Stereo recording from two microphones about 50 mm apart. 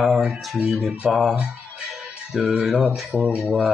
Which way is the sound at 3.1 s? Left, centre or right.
Right.